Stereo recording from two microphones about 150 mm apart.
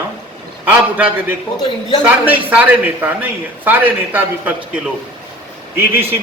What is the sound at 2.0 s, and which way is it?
A man's voice, 10° right (ahead or behind).